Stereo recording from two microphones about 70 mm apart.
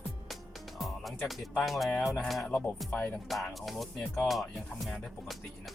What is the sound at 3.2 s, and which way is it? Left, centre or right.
Music, centre.